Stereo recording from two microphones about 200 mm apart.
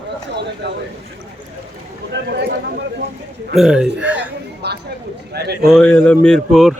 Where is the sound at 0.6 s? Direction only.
55° right (ahead or behind).